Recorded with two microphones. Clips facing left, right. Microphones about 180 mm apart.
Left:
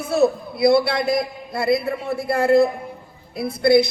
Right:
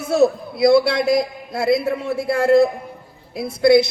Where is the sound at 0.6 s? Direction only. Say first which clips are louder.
Right 2 dB; 55° left (ahead or behind).